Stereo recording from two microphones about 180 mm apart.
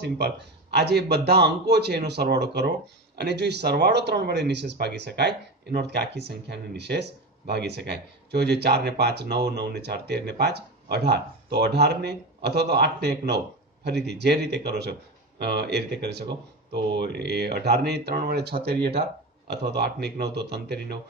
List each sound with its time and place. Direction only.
0.7 s speech: 65° right (ahead or behind)